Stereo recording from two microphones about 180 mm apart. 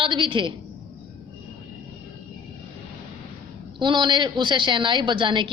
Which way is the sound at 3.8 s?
25° right (ahead or behind).